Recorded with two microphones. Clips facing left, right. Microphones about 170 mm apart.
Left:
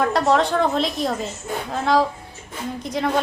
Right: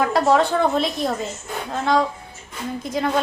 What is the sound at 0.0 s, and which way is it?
A woman's voice, centre (ahead or behind).